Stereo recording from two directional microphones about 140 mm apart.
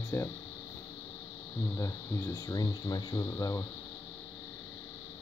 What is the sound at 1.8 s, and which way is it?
Speech, 20° left (ahead or behind).